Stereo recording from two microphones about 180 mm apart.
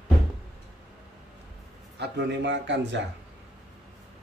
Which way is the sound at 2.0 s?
70° right (ahead or behind).